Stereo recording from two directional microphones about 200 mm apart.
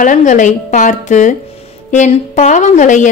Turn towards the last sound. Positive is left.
turn(degrees=40)  # may be behind; listen again after turning